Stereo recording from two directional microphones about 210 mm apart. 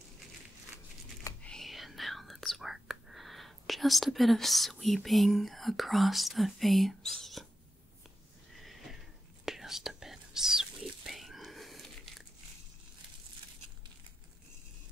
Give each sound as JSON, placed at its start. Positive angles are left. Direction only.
{"t": 1.2, "sound": "whispering", "side_deg": 5}
{"t": 8.5, "sound": "neigh", "side_deg": 0}
{"t": 9.4, "sound": "whispering", "side_deg": 0}